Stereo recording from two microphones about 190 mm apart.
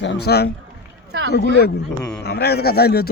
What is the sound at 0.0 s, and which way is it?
Speech, 65° left (ahead or behind).